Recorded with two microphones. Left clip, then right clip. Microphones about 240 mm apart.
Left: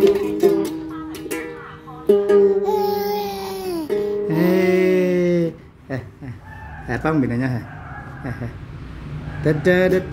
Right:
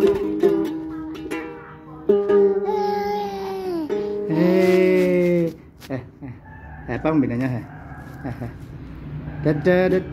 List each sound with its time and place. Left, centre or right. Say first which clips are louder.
0.0 s music: left 2 dB; centre
2.4 s music: left 2 dB; centre
6.9 s speech: even; centre
8.2 s dog: even; centre
9.4 s speech: left 2 dB; centre